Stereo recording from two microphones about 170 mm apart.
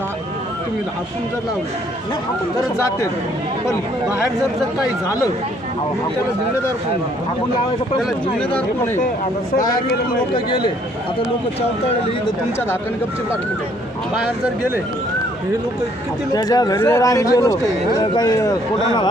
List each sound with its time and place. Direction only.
8.5 s speech: 15° left (ahead or behind)
10.3 s speech: 25° left (ahead or behind)
14.2 s speech: 5° right (ahead or behind)
16.3 s speech: 20° left (ahead or behind)